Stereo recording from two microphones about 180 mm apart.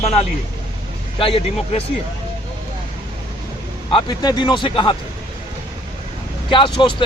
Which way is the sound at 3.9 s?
25° left (ahead or behind).